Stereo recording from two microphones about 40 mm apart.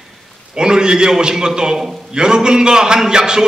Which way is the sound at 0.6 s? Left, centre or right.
Centre.